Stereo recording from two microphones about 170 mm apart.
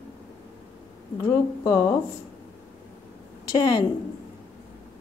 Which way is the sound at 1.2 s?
20° left (ahead or behind).